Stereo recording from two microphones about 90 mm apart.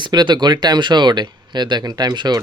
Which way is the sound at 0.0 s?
55° right (ahead or behind).